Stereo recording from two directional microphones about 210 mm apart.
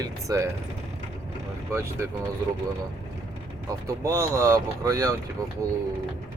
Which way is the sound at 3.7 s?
15° right (ahead or behind).